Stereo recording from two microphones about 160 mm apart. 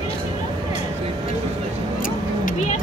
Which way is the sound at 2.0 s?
55° left (ahead or behind).